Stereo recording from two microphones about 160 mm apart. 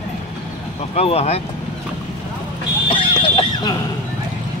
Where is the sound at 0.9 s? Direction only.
40° left (ahead or behind).